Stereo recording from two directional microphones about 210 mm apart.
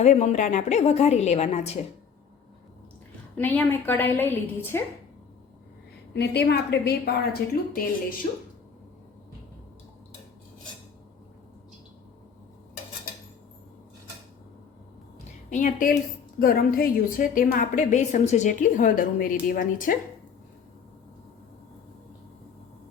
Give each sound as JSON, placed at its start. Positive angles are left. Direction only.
{"t": 0.0, "sound": "a woman's voice", "side_deg": 35}
{"t": 3.3, "sound": "a woman's voice", "side_deg": 10}
{"t": 6.1, "sound": "a woman's voice", "side_deg": 50}
{"t": 15.4, "sound": "a woman's voice", "side_deg": 35}